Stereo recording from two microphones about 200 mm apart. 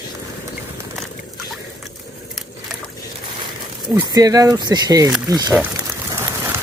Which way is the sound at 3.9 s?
20° right (ahead or behind).